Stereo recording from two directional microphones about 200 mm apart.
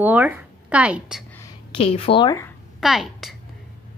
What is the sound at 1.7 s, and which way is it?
Speech, 30° left (ahead or behind).